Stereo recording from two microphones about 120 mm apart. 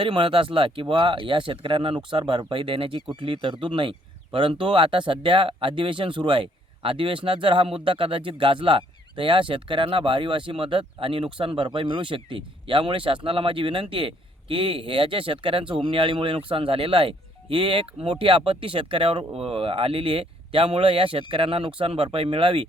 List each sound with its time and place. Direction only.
0.0 s speech: 45° right (ahead or behind)